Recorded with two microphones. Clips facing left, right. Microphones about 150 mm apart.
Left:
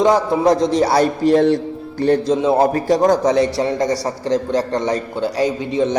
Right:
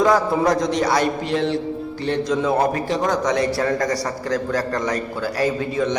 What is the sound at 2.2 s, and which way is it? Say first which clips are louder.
A man's voice: left 4 dB; 25° left (ahead or behind).